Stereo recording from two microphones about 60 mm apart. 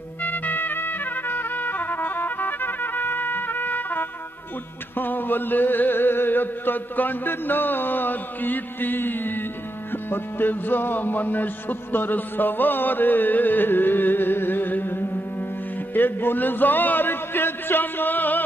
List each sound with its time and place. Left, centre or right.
0.2 s music: left
10.0 s a man's voice: left
15.9 s music: left